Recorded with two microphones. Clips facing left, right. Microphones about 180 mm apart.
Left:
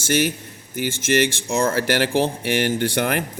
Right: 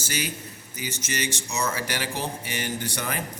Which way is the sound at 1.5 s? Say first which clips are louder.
Left 9 dB; 55° left (ahead or behind).